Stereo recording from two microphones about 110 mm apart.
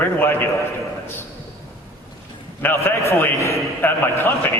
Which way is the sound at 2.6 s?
20° left (ahead or behind).